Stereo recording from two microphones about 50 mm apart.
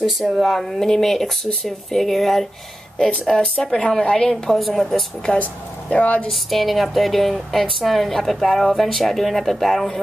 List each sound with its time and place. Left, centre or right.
0.0 s speech: centre
0.4 s a woman's voice: centre
4.6 s a woman's voice: centre
4.9 s a woman's voice: centre
5.4 s speech: left
6.3 s a woman's voice: centre